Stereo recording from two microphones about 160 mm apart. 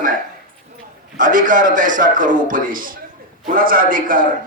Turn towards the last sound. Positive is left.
turn(degrees=-60)  # may be behind; listen again after turning